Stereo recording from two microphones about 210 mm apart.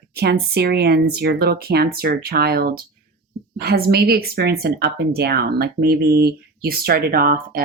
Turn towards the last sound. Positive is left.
turn(degrees=-45)  # may be behind; listen again after turning